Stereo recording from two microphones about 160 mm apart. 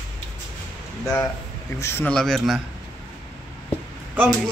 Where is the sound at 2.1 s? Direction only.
Centre (ahead or behind).